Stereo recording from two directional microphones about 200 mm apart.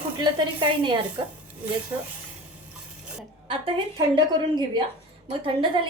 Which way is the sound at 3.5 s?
25° right (ahead or behind).